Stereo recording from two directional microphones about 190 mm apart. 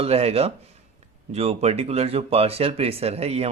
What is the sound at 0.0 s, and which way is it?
A man's voice, 30° right (ahead or behind).